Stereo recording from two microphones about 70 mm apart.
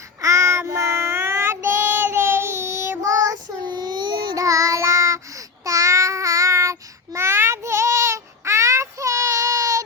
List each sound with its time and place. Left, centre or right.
0.2 s child singing: right
3.7 s a sound: right
4.4 s child singing: right
5.6 s babbling: right